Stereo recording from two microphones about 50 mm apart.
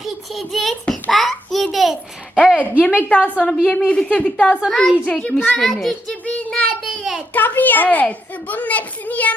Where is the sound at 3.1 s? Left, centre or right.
Left.